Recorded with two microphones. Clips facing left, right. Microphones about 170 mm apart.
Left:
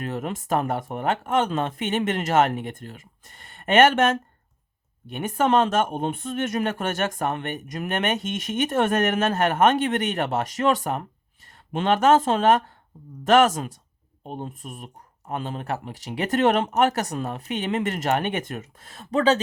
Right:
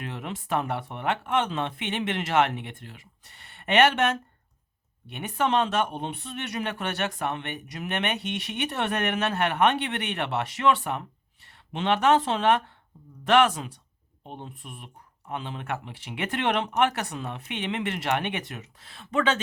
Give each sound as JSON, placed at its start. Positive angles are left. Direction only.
{"t": 0.0, "sound": "speech", "side_deg": 45}